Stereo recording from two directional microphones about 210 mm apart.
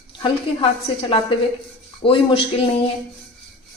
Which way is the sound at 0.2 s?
25° left (ahead or behind).